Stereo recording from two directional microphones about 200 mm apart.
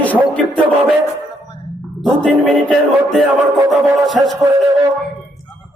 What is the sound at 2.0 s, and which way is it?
A man's voice, centre (ahead or behind).